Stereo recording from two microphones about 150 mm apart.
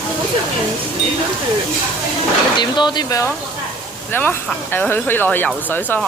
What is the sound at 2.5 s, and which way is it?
Speech, 30° left (ahead or behind).